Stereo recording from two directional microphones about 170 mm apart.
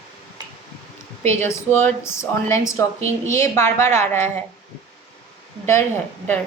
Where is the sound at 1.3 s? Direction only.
15° left (ahead or behind).